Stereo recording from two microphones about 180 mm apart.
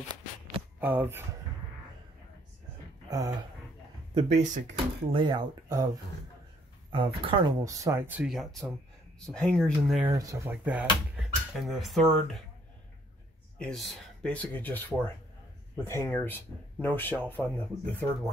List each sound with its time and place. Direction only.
0.7 s speech: 10° right (ahead or behind)
3.1 s speech: 20° right (ahead or behind)
4.1 s speech: 35° right (ahead or behind)
5.1 s speech: 25° right (ahead or behind)
6.9 s speech: 30° right (ahead or behind)
7.6 s speech: 15° right (ahead or behind); by 10.0 s centre (ahead or behind)
10.0 s speech: 20° right (ahead or behind); by 12.4 s centre (ahead or behind)
13.6 s speech: 5° left (ahead or behind)